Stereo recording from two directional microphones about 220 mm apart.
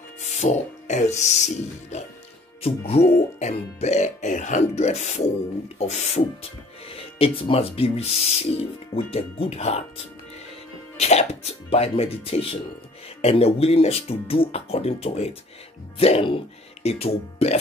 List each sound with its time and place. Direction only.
0.2 s speech: 30° left (ahead or behind)
11.0 s speech: 30° left (ahead or behind)